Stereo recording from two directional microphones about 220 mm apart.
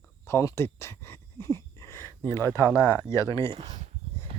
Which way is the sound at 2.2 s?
10° left (ahead or behind).